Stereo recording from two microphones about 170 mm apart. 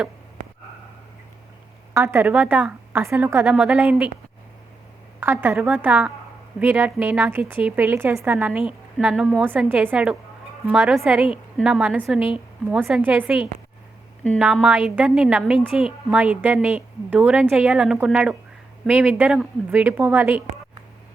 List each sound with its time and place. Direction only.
1.9 s a woman's voice: 15° right (ahead or behind)
5.2 s a woman's voice: 15° right (ahead or behind)